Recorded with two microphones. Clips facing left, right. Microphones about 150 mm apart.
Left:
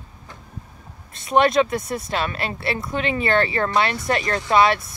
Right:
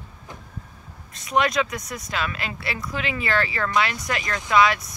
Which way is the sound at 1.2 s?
25° left (ahead or behind).